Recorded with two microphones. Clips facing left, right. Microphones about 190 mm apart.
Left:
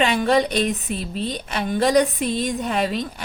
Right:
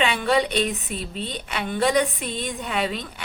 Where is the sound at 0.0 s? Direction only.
40° left (ahead or behind).